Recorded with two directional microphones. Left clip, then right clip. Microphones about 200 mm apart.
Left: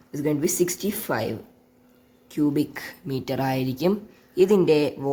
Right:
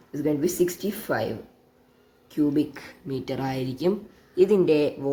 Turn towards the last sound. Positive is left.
turn(degrees=40)  # may be behind; listen again after turning